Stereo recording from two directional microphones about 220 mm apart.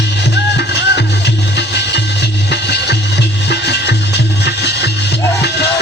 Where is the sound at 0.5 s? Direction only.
50° left (ahead or behind).